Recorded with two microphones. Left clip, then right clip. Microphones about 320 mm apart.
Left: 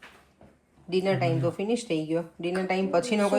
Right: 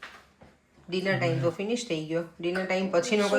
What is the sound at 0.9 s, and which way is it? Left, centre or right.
Speech, centre.